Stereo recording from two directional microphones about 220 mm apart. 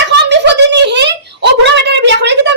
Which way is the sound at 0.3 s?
50° right (ahead or behind).